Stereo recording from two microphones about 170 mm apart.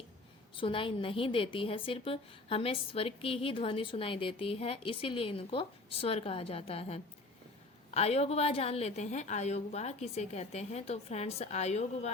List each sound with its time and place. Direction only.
0.5 s a woman's voice: 30° left (ahead or behind)